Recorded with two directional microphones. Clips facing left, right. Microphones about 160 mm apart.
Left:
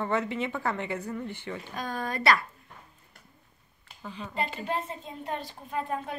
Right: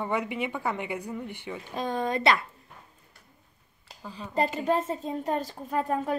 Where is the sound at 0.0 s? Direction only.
15° right (ahead or behind).